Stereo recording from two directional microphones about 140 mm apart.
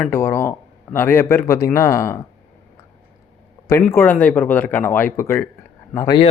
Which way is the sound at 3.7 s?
15° left (ahead or behind).